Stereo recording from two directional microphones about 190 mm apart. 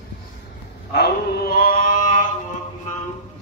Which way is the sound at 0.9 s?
55° left (ahead or behind).